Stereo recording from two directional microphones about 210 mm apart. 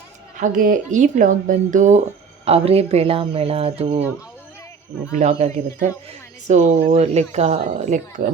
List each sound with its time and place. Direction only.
0.3 s speech: 40° right (ahead or behind)
5.1 s speech: 35° right (ahead or behind)
7.0 s speech: 30° right (ahead or behind)